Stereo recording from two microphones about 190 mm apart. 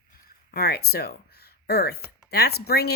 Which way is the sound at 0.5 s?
55° left (ahead or behind).